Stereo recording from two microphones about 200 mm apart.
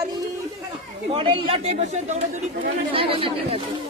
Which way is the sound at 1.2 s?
25° right (ahead or behind).